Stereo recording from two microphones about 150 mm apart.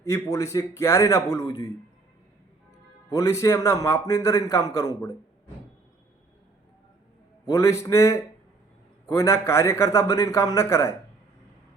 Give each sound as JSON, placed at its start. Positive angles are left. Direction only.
{"t": 0.0, "sound": "a man's voice", "side_deg": 20}
{"t": 3.1, "sound": "a man's voice", "side_deg": 20}
{"t": 7.5, "sound": "a man's voice", "side_deg": 20}